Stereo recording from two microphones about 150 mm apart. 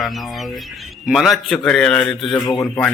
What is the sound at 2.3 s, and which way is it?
Speech, 30° left (ahead or behind).